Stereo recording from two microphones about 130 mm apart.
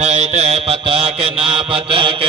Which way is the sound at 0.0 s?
60° right (ahead or behind).